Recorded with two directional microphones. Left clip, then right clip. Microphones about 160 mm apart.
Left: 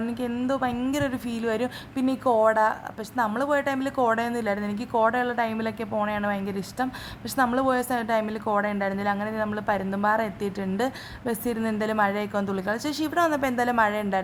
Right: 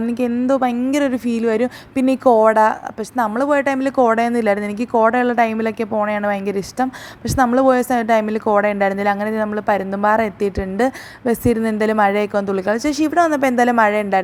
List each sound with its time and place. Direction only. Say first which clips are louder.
0.1 s a woman's voice: right 12 dB; 30° right (ahead or behind)